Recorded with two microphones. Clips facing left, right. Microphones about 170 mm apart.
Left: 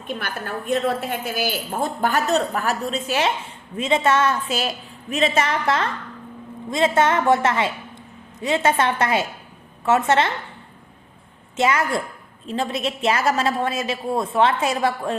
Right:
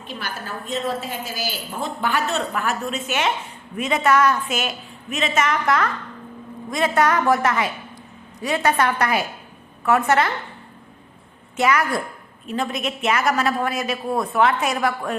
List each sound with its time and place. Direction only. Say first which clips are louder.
0.1 s a woman's voice: left 3 dB; 55° left (ahead or behind); by 10.3 s 25° left (ahead or behind)
11.5 s a woman's voice: even; 25° left (ahead or behind)